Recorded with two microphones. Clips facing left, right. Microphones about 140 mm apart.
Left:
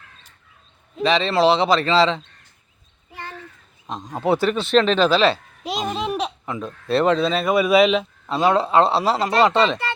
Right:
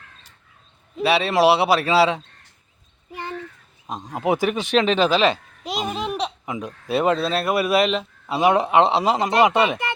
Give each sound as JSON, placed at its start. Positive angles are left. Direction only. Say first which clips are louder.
{"t": 0.9, "sound": "speech", "louder": "even", "side_deg": -10}
{"t": 3.8, "sound": "speech", "louder": "left 1 dB", "side_deg": -10}
{"t": 5.6, "sound": "a sound", "louder": "left 1 dB", "side_deg": 0}
{"t": 6.4, "sound": "speech", "louder": "left 1 dB", "side_deg": -15}
{"t": 8.3, "sound": "speech", "louder": "even", "side_deg": -15}